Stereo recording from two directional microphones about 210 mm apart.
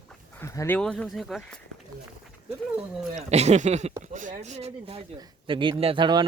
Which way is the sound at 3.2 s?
30° right (ahead or behind).